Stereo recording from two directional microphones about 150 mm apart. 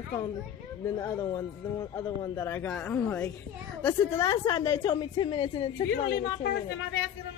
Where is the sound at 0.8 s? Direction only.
20° left (ahead or behind).